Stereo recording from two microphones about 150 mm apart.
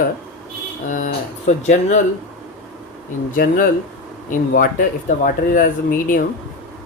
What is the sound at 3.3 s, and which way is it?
Speech, 65° left (ahead or behind).